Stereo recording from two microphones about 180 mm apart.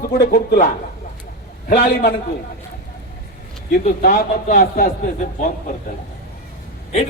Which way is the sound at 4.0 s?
50° left (ahead or behind).